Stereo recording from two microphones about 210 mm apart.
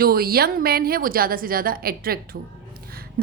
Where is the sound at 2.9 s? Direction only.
45° right (ahead or behind).